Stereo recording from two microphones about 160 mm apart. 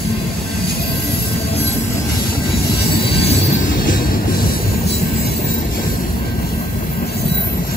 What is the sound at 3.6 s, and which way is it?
Train, 60° left (ahead or behind).